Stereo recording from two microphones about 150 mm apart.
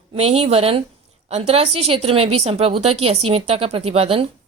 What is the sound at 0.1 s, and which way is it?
A woman's voice, 40° right (ahead or behind).